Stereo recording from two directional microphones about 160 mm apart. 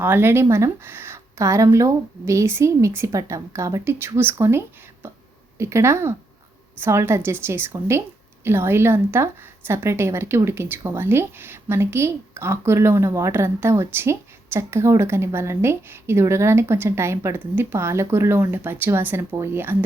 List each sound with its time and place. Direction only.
0.0 s a woman's voice: 15° right (ahead or behind)
5.0 s a sound: 15° right (ahead or behind)
5.5 s a woman's voice: 15° right (ahead or behind)